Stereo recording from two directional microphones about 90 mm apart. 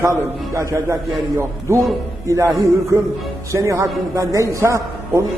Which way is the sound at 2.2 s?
35° right (ahead or behind).